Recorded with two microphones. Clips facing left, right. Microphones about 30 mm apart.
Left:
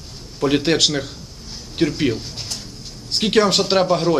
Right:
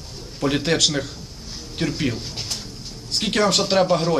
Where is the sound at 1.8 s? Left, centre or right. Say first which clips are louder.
Left 6 dB; left.